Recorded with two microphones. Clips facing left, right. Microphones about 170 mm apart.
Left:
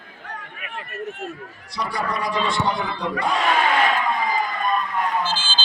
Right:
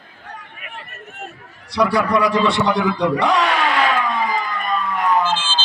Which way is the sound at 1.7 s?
75° right (ahead or behind).